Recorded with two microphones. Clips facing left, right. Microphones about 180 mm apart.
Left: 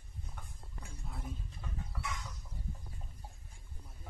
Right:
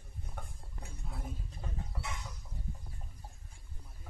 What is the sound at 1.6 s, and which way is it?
Chicken, 30° right (ahead or behind).